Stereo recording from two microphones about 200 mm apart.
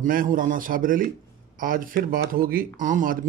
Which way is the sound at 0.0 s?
40° right (ahead or behind).